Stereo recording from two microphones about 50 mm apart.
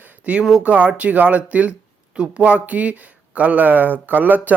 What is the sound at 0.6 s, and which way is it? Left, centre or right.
Speech, right.